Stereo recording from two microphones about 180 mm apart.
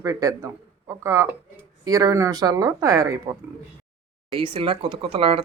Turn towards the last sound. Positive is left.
turn(degrees=-30)  # may be behind; listen again after turning